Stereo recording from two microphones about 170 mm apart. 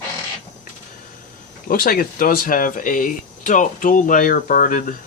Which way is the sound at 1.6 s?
60° left (ahead or behind).